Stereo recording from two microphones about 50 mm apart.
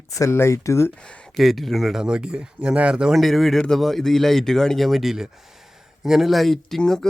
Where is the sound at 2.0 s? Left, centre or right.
Centre.